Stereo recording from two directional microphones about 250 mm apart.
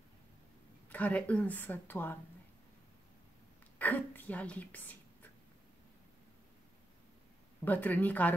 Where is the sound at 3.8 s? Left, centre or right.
Centre.